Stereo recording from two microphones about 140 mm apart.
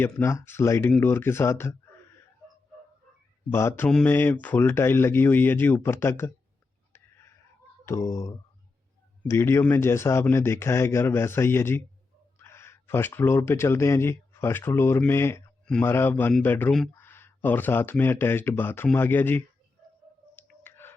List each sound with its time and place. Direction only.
0.0 s speech: 20° left (ahead or behind)
3.5 s speech: 20° left (ahead or behind)
7.9 s speech: 20° left (ahead or behind)
20.3 s clicking: 15° left (ahead or behind)